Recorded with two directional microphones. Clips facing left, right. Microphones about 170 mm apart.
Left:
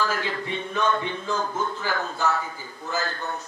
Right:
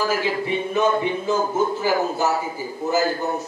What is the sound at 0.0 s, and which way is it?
A man's voice, 15° right (ahead or behind).